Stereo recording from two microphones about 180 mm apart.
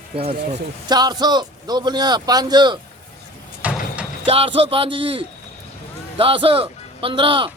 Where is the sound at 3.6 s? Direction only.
5° right (ahead or behind).